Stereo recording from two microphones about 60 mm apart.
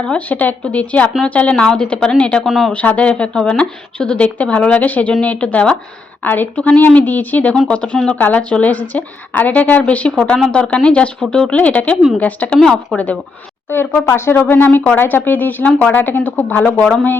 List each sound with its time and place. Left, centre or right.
0.0 s speech: centre
0.3 s speech: left
2.4 s speech: centre
2.7 s a woman's voice: left
7.7 s speech: centre
12.5 s speech: centre
13.7 s speech: left
14.3 s a woman's voice: left